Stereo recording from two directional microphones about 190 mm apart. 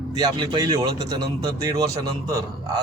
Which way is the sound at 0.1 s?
25° right (ahead or behind).